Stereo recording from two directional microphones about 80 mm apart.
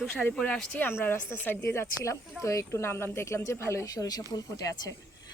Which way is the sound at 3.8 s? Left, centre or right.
Left.